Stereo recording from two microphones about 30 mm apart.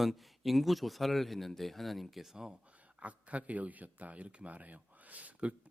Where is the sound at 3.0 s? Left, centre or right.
Right.